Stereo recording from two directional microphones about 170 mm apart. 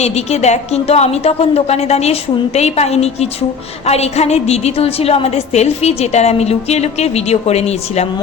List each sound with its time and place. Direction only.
0.0 s a woman's voice: 40° left (ahead or behind)